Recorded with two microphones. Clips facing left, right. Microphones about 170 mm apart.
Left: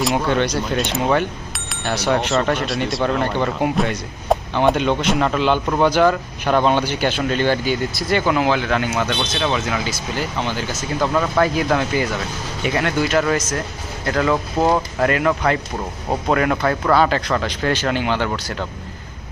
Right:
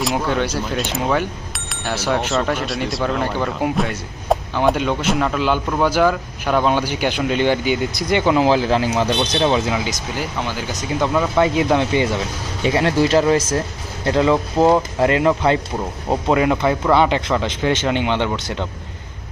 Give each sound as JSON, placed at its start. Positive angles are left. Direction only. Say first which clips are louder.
{"t": 0.0, "sound": "speech", "louder": "left 1 dB", "side_deg": 0}
{"t": 9.7, "sound": "speech", "louder": "even", "side_deg": -15}
{"t": 16.0, "sound": "speech", "louder": "right 2 dB", "side_deg": -15}